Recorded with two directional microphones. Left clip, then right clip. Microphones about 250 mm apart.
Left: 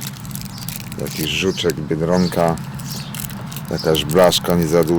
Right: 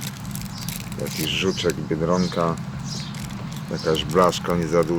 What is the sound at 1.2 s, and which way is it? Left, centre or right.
Speech, left.